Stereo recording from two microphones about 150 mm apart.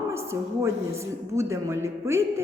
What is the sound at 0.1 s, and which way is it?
A woman's voice, 20° right (ahead or behind).